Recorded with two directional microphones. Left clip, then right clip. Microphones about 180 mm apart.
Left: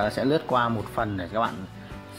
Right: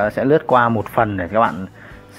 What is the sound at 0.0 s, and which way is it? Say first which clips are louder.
Speech: right 8 dB; 15° right (ahead or behind).